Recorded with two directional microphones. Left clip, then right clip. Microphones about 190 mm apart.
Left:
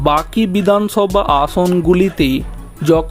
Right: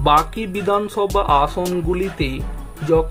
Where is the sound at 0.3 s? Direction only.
35° left (ahead or behind).